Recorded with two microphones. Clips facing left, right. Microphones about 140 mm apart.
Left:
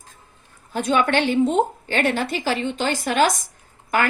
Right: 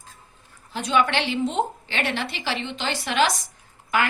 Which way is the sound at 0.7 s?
50° left (ahead or behind).